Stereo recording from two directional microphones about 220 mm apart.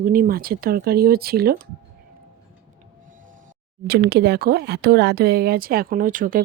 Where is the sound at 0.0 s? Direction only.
40° right (ahead or behind).